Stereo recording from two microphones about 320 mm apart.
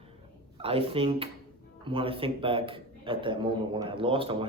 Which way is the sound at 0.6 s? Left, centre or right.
Centre.